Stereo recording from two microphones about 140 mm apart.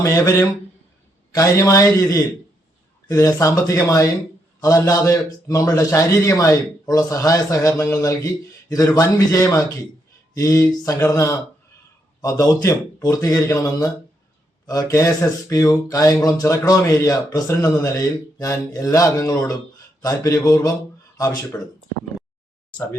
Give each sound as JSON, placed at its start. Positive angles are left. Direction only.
{"t": 0.0, "sound": "a man's voice", "side_deg": 20}